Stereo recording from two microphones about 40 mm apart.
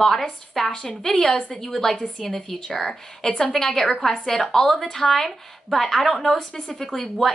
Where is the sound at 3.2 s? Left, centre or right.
Left.